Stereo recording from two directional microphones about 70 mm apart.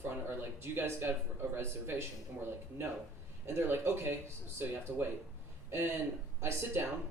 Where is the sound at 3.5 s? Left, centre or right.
Right.